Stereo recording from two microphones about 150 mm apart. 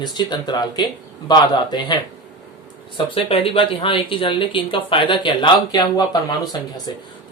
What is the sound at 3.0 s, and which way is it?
Speech, 35° left (ahead or behind).